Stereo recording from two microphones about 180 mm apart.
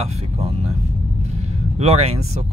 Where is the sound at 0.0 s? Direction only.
35° right (ahead or behind).